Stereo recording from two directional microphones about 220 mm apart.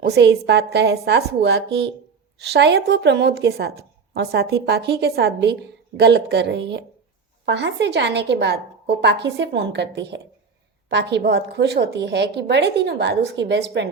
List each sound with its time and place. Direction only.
0.0 s a woman's voice: 50° right (ahead or behind)